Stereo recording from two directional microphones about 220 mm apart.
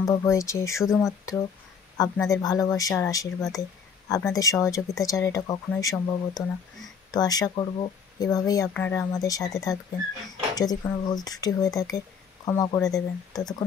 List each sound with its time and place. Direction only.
0.0 s speech: 15° left (ahead or behind)